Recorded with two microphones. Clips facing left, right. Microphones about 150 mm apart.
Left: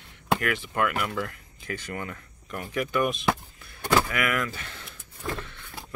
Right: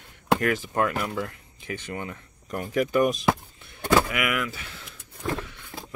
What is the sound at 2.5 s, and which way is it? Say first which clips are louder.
Speech: right 4 dB; 40° right (ahead or behind).